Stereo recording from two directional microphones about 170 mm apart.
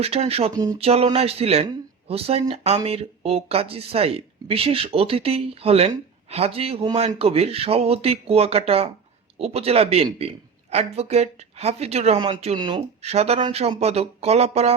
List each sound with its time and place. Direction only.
0.0 s speech: 35° right (ahead or behind)
0.5 s speech: 20° right (ahead or behind)
0.8 s speech: 35° right (ahead or behind)
13.0 s speech: 40° right (ahead or behind)